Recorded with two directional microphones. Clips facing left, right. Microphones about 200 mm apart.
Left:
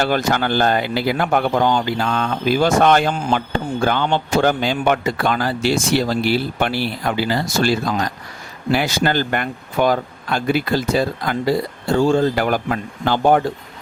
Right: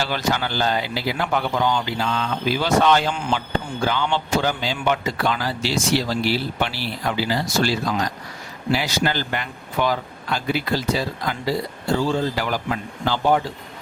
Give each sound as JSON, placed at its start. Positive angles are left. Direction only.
{"t": 0.0, "sound": "a man's voice", "side_deg": 50}